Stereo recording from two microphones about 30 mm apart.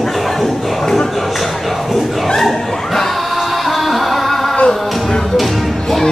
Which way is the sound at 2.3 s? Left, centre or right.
Centre.